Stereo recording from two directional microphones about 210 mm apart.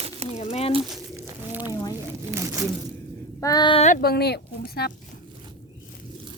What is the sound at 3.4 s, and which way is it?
Speech, 20° left (ahead or behind).